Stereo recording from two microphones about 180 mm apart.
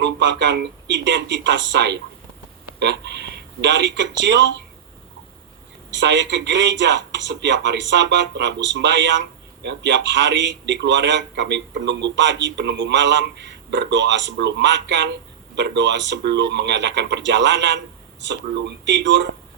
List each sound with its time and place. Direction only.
0.0 s speech: 80° right
5.9 s a man's voice: 80° right